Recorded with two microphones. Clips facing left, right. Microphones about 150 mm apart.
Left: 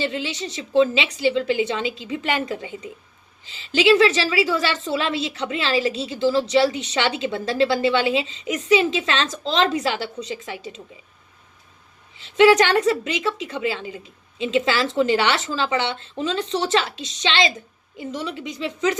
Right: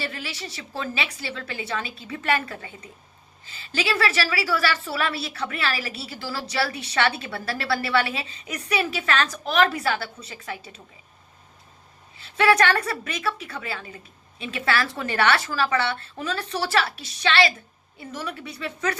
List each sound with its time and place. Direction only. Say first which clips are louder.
0.0 s a woman's voice: left 7 dB; 20° left (ahead or behind)
12.5 s a woman's voice: left 2 dB; 15° left (ahead or behind)